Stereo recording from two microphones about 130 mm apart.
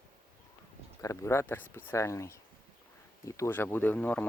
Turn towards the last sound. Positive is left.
turn(degrees=10)  # may be behind; listen again after turning